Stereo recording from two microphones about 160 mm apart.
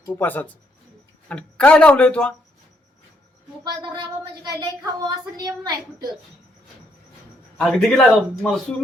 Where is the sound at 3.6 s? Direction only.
30° right (ahead or behind).